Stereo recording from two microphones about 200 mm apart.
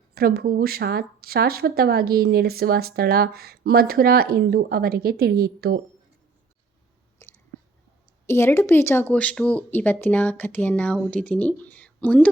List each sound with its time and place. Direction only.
0.1 s speech: 50° right (ahead or behind)
7.2 s a sound: 15° left (ahead or behind)
8.3 s speech: 10° left (ahead or behind)